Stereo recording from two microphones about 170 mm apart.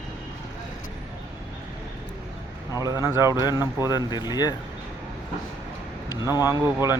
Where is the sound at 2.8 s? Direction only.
20° right (ahead or behind).